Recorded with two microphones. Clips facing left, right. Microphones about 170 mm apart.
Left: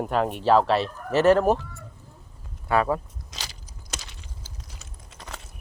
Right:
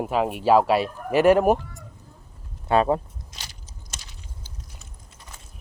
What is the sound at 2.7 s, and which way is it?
Speech, 25° right (ahead or behind).